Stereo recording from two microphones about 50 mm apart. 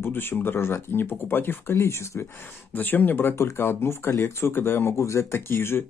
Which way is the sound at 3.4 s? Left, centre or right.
Left.